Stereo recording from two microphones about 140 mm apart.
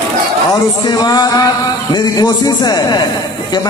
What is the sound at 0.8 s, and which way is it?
A man's voice, 30° left (ahead or behind).